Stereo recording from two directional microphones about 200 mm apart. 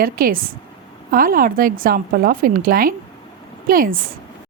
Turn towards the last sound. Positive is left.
turn(degrees=-45)  # may be behind; listen again after turning